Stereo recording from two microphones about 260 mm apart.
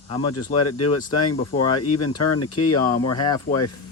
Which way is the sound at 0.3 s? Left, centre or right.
Left.